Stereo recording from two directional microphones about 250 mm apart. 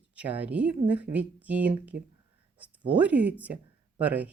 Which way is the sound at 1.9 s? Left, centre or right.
Right.